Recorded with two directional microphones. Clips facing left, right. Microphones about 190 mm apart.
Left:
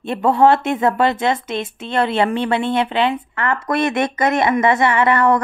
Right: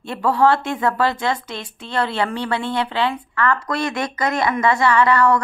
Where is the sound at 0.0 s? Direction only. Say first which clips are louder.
Left 3 dB; 20° left (ahead or behind).